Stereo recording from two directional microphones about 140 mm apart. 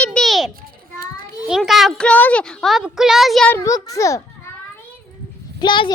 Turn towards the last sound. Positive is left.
turn(degrees=35)  # may be behind; listen again after turning